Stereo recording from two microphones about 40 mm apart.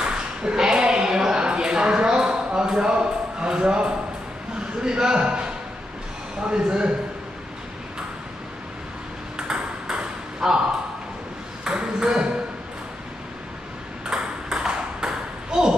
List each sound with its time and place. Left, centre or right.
0.0 s a sound: right
4.8 s a man's voice: centre
9.4 s ping: right
11.6 s ping: right
14.0 s ping: centre